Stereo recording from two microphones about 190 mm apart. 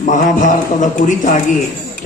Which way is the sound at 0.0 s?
40° left (ahead or behind).